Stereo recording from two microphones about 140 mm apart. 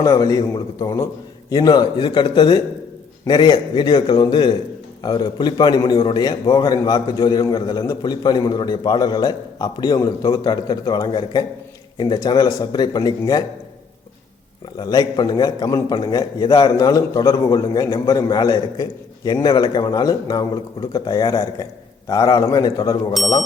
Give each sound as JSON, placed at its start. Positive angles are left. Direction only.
{"t": 0.0, "sound": "a man's voice", "side_deg": 25}
{"t": 14.8, "sound": "a man's voice", "side_deg": 30}